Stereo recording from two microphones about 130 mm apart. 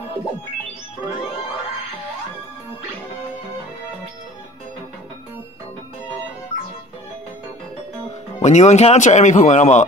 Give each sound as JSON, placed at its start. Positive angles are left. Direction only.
{"t": 8.4, "sound": "speech", "side_deg": 60}